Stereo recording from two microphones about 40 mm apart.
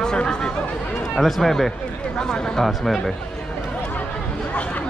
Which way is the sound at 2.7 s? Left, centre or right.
Centre.